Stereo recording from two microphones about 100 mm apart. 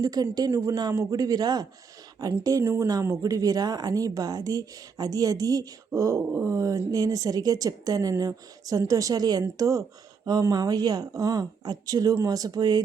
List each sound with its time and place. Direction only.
0.0 s speech: 40° right (ahead or behind)
2.4 s speech: 30° right (ahead or behind)